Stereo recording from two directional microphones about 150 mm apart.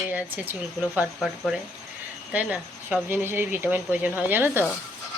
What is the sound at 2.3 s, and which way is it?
Speech, 10° right (ahead or behind).